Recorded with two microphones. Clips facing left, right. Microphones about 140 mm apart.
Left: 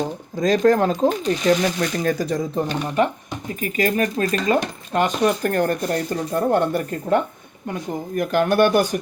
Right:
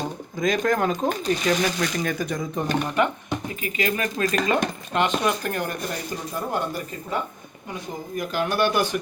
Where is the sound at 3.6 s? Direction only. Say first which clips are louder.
Left 7 dB; 45° left (ahead or behind).